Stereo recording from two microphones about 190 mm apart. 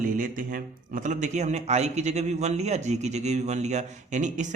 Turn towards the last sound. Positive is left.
turn(degrees=-40)  # may be behind; listen again after turning